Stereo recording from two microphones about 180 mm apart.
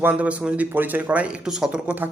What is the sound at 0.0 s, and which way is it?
Speech, 10° right (ahead or behind).